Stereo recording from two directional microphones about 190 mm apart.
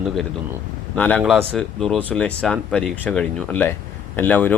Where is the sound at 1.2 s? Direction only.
5° right (ahead or behind).